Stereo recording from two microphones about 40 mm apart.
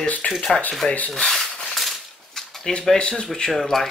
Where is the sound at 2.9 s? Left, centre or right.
Left.